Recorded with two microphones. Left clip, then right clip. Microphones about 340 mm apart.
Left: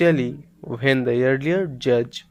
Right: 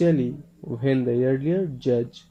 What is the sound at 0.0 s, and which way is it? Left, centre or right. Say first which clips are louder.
Speech: left 4 dB; left.